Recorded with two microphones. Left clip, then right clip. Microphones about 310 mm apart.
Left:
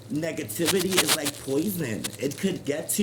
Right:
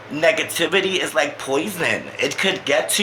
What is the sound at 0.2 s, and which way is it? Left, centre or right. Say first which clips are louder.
A man's voice: right 12 dB; left.